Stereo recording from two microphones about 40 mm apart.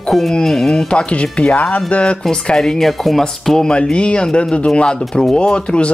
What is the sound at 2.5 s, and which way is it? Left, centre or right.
Speech, centre.